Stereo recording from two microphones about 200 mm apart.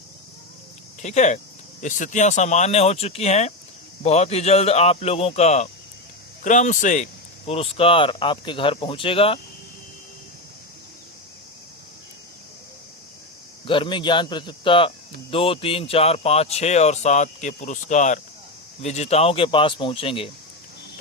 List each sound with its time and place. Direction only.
1.0 s speech: 35° left (ahead or behind)
13.7 s speech: 25° left (ahead or behind)